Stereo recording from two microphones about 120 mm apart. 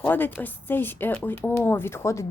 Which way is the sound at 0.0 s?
15° left (ahead or behind).